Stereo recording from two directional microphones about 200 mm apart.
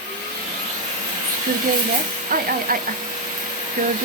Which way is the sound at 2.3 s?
45° right (ahead or behind).